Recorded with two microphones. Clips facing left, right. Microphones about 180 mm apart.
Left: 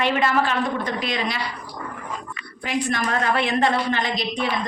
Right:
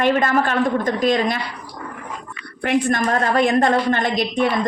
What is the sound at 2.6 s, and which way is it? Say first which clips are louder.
A woman's voice: right 6 dB; 45° right (ahead or behind).